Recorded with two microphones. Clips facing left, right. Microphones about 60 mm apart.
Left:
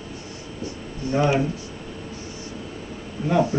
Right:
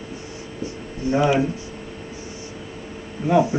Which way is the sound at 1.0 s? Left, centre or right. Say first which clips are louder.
Right 3 dB; right.